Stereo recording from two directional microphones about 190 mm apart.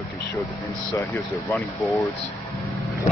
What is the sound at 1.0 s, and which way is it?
Speech, 15° left (ahead or behind).